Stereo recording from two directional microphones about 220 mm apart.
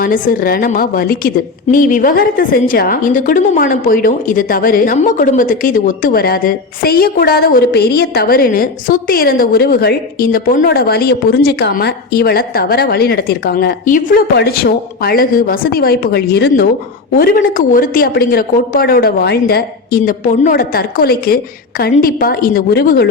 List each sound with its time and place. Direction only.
0.0 s a woman's voice: 40° left (ahead or behind)